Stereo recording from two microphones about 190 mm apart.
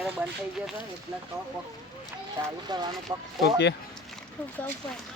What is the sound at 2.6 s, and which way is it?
Speech, 20° right (ahead or behind).